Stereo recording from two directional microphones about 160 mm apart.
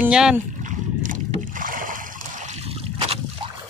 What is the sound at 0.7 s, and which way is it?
Rowboat, 55° right (ahead or behind).